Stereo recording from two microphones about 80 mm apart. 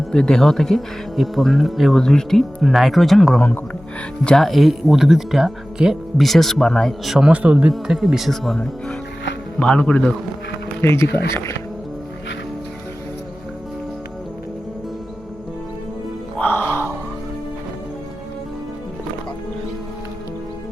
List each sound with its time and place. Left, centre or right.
0.1 s speech: centre
7.3 s speech: centre
7.7 s speech: centre
9.6 s speech: centre
10.8 s speech: left
16.4 s music: left